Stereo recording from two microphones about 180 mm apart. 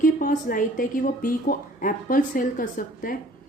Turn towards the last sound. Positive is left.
turn(degrees=50)  # may be behind; listen again after turning